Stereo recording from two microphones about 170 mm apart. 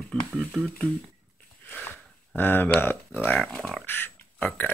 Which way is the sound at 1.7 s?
10° left (ahead or behind).